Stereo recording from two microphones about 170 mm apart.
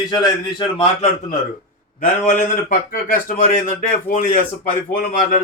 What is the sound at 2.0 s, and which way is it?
A man's voice, 50° left (ahead or behind).